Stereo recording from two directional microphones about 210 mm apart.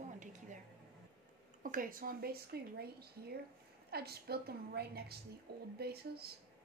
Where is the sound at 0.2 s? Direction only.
35° right (ahead or behind).